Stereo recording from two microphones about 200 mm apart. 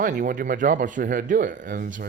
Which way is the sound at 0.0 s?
40° right (ahead or behind).